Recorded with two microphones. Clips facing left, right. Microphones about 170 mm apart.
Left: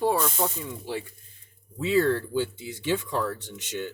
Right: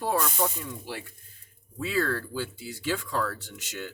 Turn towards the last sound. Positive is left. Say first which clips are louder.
# left 5 dB
turn(degrees=20)  # may be behind; listen again after turning